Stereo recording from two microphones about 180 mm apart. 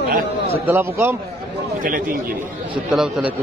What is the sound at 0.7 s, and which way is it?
Speech, 15° right (ahead or behind).